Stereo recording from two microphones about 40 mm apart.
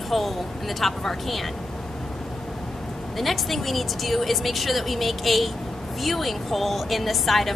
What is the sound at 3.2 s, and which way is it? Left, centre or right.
A woman's voice, centre.